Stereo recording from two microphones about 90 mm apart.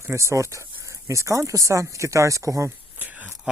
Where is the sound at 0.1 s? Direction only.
30° right (ahead or behind).